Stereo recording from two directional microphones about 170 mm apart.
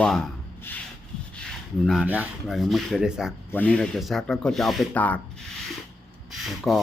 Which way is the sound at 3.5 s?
5° left (ahead or behind).